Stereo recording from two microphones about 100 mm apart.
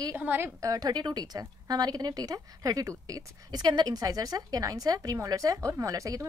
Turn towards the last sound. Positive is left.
turn(degrees=-35)  # may be behind; listen again after turning